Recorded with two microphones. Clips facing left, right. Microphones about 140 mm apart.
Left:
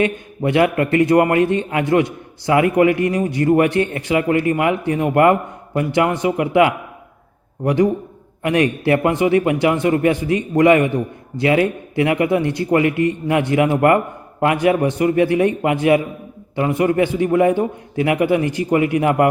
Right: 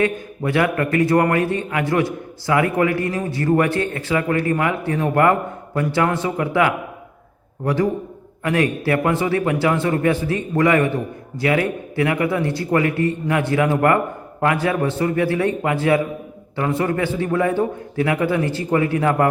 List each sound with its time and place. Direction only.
0.0 s a man's voice: 20° left (ahead or behind)